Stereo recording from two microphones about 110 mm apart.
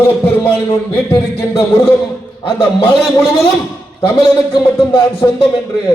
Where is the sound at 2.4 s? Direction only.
50° left (ahead or behind).